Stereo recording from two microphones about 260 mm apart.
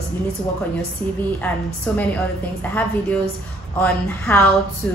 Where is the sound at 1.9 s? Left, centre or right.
Centre.